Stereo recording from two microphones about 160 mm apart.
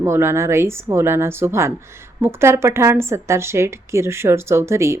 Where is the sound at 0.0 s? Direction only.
15° right (ahead or behind).